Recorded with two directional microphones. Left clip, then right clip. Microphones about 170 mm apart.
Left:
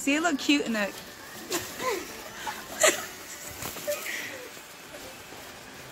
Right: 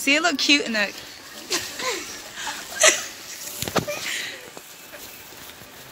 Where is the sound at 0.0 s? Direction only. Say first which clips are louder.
Right 6 dB; 25° right (ahead or behind).